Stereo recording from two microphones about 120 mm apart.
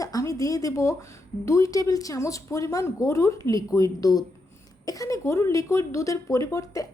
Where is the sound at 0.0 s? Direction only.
30° left (ahead or behind).